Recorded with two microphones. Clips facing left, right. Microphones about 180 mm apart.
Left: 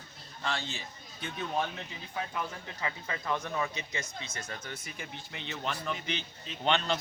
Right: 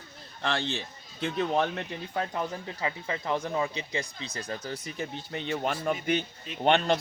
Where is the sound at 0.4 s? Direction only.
65° right (ahead or behind).